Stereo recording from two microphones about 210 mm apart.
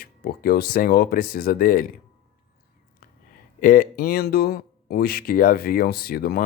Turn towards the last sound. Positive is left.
turn(degrees=45)  # may be behind; listen again after turning